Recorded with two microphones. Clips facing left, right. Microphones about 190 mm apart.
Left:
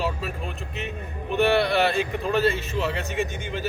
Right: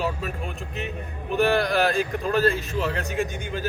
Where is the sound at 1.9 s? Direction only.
5° left (ahead or behind).